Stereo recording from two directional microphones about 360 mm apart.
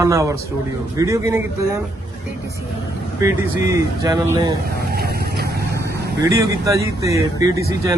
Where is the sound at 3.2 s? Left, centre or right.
Centre.